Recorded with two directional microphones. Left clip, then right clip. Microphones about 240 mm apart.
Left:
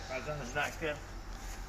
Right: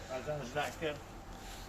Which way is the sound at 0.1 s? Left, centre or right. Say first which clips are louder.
Even; centre.